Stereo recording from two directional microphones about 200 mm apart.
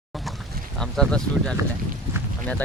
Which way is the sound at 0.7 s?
Centre (ahead or behind).